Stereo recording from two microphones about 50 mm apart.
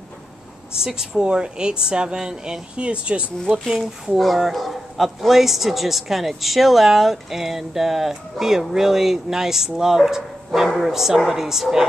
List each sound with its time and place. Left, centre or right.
0.7 s speech: centre
3.8 s speech: centre
4.2 s a man's voice: centre